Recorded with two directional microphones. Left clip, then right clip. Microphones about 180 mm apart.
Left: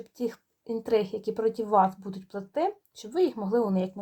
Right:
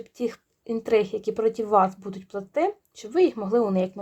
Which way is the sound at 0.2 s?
35° right (ahead or behind).